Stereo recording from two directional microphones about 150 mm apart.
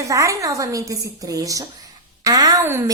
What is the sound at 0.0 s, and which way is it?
A woman's voice, 20° right (ahead or behind).